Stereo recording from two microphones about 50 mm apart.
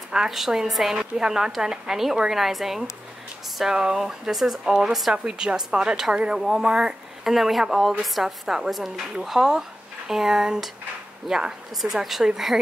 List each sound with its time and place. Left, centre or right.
0.3 s speech: centre